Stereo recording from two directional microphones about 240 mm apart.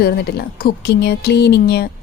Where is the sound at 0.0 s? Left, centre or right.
Left.